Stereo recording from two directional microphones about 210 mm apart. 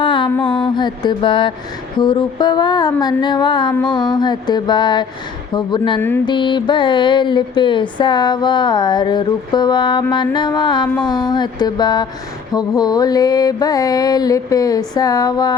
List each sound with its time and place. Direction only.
0.0 s mantra: 25° left (ahead or behind)